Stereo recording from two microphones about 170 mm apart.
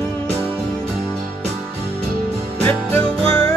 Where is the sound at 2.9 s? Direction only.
10° left (ahead or behind).